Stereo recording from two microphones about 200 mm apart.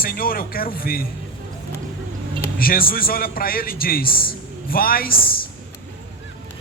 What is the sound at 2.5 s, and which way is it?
A man's voice, 45° left (ahead or behind).